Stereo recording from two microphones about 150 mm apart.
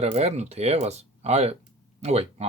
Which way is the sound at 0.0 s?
45° right (ahead or behind).